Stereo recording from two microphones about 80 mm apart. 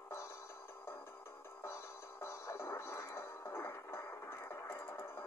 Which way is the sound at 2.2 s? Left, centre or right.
Left.